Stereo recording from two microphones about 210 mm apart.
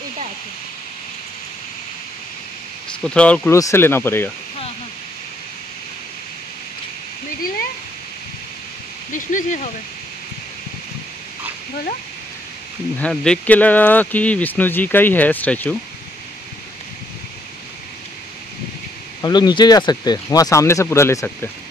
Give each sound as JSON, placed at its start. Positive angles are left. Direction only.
{"t": 3.0, "sound": "speech", "side_deg": 5}
{"t": 9.1, "sound": "speech", "side_deg": 35}
{"t": 12.9, "sound": "speech", "side_deg": 5}
{"t": 19.2, "sound": "speech", "side_deg": 20}